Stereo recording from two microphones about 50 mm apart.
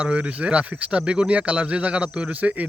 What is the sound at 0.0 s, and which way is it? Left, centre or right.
Speech, right.